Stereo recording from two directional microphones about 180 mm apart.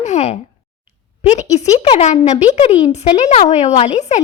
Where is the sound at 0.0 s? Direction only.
40° left (ahead or behind).